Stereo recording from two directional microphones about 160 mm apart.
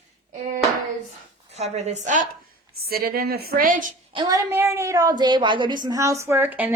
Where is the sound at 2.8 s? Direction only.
70° right (ahead or behind).